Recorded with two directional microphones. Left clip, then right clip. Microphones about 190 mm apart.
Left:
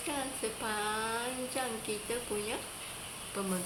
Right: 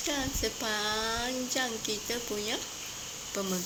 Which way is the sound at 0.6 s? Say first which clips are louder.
Right 2 dB; 25° right (ahead or behind).